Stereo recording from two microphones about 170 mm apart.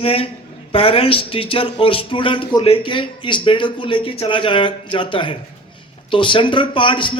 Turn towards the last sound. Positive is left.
turn(degrees=30)  # may be behind; listen again after turning